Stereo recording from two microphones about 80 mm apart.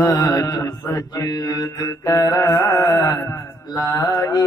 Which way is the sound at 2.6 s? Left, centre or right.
Left.